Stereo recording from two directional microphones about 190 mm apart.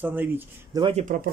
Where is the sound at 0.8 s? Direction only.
35° right (ahead or behind).